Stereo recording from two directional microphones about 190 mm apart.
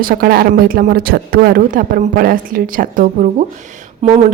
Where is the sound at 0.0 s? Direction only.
50° right (ahead or behind).